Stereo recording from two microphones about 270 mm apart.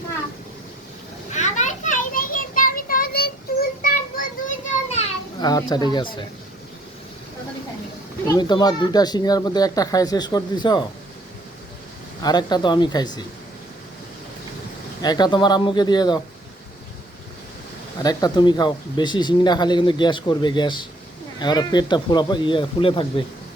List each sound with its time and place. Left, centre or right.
1.3 s children playing: left
8.3 s speech: centre
12.2 s speech: centre
15.0 s speech: centre
18.0 s speech: centre